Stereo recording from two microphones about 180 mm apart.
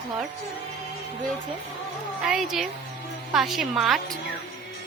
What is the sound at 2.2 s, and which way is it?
Speech, centre (ahead or behind).